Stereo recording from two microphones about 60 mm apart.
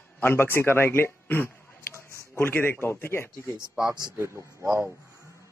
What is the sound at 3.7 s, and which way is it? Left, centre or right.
Speech, centre.